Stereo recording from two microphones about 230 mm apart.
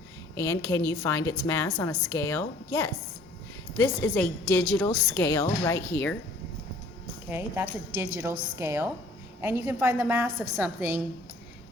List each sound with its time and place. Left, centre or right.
0.3 s a woman's voice: centre
7.3 s a woman's voice: centre